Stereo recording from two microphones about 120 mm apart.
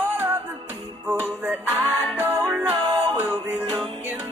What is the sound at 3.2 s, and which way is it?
Music, 15° right (ahead or behind).